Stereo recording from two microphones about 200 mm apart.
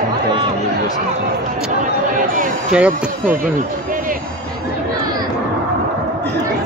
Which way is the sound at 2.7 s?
5° right (ahead or behind).